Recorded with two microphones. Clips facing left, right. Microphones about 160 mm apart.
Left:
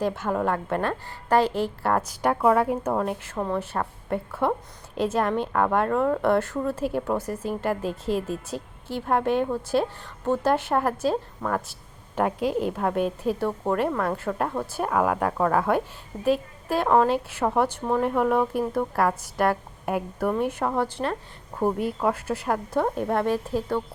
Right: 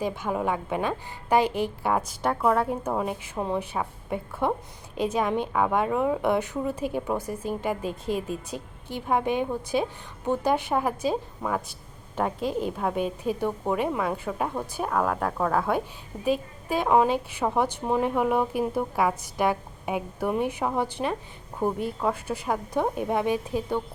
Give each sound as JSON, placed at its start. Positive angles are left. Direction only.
{"t": 0.0, "sound": "a woman's voice", "side_deg": -5}
{"t": 3.3, "sound": "a woman's voice", "side_deg": -15}
{"t": 4.9, "sound": "a woman's voice", "side_deg": 5}
{"t": 10.5, "sound": "a woman's voice", "side_deg": 5}
{"t": 21.6, "sound": "a woman's voice", "side_deg": 5}